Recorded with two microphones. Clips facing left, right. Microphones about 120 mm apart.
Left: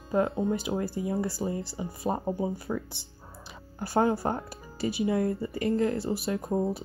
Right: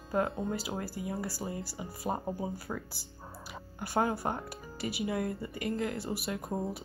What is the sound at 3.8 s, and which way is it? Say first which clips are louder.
Speech: left 5 dB; 30° left (ahead or behind).